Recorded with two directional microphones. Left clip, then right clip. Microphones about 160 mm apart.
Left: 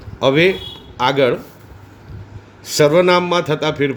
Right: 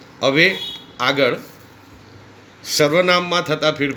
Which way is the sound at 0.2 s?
70° left (ahead or behind).